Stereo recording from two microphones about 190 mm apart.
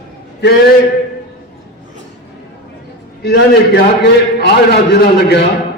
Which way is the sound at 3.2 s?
60° left (ahead or behind).